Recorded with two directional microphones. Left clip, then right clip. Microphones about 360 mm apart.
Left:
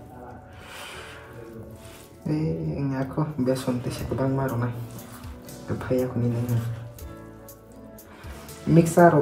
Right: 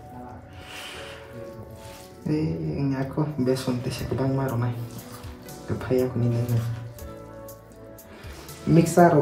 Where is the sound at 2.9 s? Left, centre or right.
Centre.